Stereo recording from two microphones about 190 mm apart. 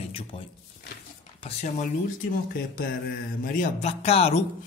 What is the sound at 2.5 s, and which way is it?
Speech, 50° left (ahead or behind).